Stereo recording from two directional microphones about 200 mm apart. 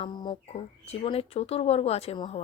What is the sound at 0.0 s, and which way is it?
Speech, 25° left (ahead or behind).